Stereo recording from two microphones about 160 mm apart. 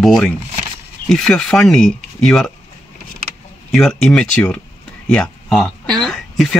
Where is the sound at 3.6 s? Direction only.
Centre (ahead or behind).